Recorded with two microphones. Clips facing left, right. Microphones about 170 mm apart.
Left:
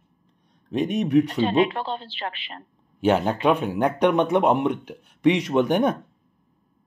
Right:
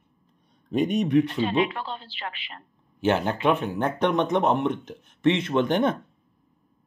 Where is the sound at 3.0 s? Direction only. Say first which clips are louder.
Left 3 dB; 15° left (ahead or behind).